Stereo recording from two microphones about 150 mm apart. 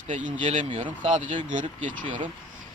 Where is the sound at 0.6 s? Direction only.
40° right (ahead or behind).